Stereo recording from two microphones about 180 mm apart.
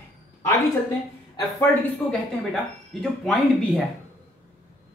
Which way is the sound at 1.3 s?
20° left (ahead or behind).